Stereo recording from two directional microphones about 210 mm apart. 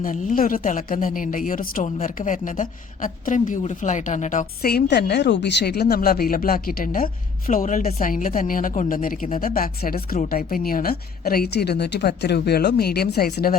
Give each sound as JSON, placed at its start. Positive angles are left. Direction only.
{"t": 0.0, "sound": "a woman's voice", "side_deg": 40}